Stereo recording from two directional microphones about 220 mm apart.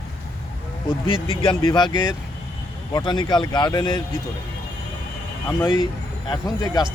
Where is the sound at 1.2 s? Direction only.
25° left (ahead or behind).